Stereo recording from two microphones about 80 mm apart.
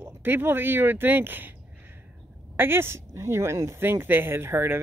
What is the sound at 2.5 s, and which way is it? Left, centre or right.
Speech, right.